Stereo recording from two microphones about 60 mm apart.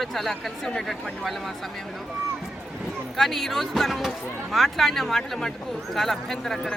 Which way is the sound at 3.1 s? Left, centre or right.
Centre.